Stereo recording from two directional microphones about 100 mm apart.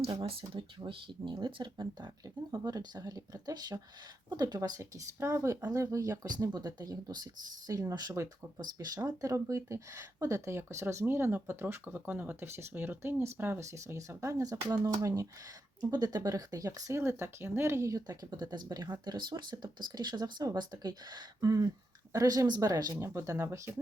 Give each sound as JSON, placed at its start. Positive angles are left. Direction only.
{"t": 0.0, "sound": "speech", "side_deg": -65}
{"t": 2.5, "sound": "speech", "side_deg": -40}
{"t": 4.8, "sound": "speech", "side_deg": -30}